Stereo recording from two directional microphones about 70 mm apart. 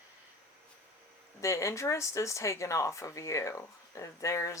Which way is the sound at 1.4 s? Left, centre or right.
Left.